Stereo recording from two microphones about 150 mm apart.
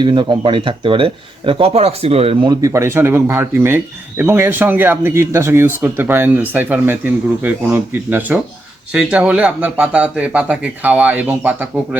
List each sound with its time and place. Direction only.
0.0 s speech: 30° right (ahead or behind); by 11.9 s 10° right (ahead or behind)